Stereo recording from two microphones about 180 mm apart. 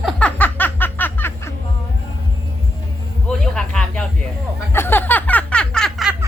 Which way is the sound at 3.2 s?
5° left (ahead or behind).